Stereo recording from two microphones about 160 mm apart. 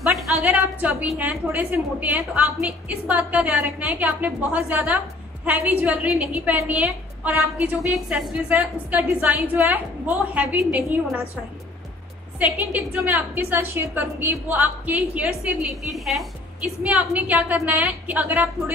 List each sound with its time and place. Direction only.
0.0 s a woman's voice: 10° right (ahead or behind)
12.4 s a woman's voice: 10° right (ahead or behind)